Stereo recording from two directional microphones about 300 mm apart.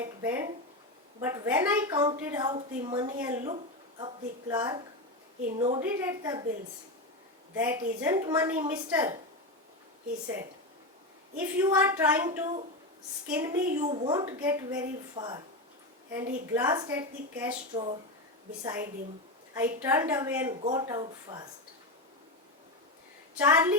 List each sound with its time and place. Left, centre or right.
0.0 s a woman's voice: centre
7.5 s a woman's voice: centre
11.3 s a woman's voice: centre
13.7 s a woman's voice: right
16.5 s a woman's voice: centre
18.6 s a woman's voice: centre
20.6 s a woman's voice: right
23.4 s a woman's voice: centre